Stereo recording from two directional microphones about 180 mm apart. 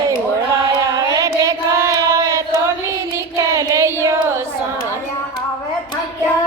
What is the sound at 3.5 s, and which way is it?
Child singing, 15° right (ahead or behind).